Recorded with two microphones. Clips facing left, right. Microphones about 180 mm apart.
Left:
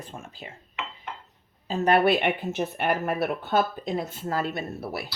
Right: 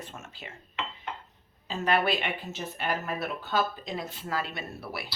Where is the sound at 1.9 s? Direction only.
55° left (ahead or behind).